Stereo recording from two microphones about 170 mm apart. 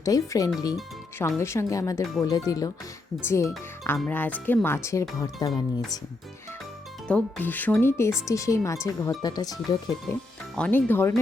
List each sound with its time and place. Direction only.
0.0 s speech: 20° left (ahead or behind)
7.1 s speech: 10° left (ahead or behind)
10.5 s speech: 10° left (ahead or behind)